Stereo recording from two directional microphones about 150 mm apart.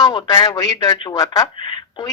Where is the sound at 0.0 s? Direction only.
25° left (ahead or behind).